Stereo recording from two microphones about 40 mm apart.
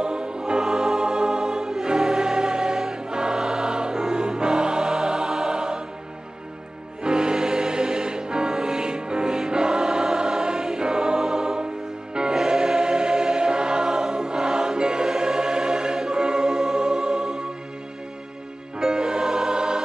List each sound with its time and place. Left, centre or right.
0.0 s music: right
7.0 s music: right
18.8 s music: centre